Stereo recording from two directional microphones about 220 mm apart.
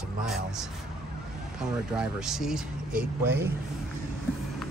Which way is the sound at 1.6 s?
5° right (ahead or behind).